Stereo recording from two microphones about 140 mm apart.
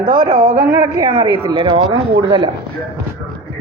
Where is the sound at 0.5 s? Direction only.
30° right (ahead or behind).